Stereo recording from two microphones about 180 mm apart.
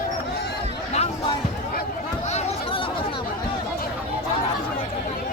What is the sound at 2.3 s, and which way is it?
Chatter, 35° left (ahead or behind).